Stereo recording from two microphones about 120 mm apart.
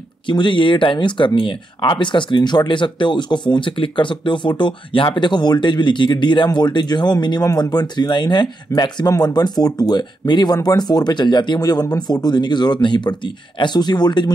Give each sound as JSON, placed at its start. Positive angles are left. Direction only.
{"t": 0.3, "sound": "speech", "side_deg": 40}